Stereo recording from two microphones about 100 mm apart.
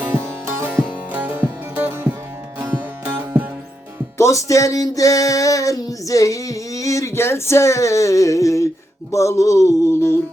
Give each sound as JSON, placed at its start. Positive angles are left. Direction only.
{"t": 0.1, "sound": "music", "side_deg": -25}
{"t": 4.2, "sound": "music", "side_deg": 30}
{"t": 9.1, "sound": "a sound", "side_deg": 30}